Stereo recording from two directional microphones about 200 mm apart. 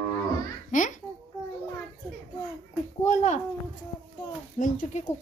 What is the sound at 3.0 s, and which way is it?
Speech, 35° left (ahead or behind).